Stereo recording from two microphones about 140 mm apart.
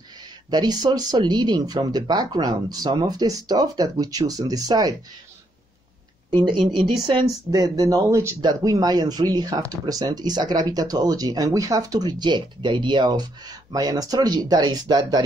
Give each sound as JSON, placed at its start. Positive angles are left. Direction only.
{"t": 0.5, "sound": "speech", "side_deg": -30}
{"t": 6.3, "sound": "speech", "side_deg": -35}